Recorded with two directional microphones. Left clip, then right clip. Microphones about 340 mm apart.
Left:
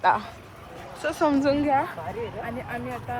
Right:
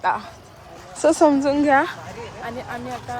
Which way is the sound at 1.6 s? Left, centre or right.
Right.